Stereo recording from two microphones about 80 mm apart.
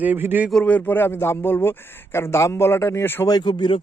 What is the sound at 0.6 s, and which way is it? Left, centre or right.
A man's voice, left.